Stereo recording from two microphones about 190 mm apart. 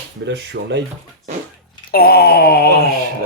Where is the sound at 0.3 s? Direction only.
65° right (ahead or behind).